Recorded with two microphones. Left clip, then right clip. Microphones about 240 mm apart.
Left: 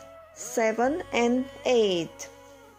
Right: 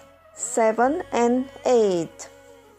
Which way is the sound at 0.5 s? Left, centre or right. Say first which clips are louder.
Right 5 dB; centre.